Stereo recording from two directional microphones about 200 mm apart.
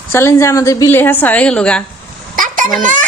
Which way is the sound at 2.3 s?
40° right (ahead or behind).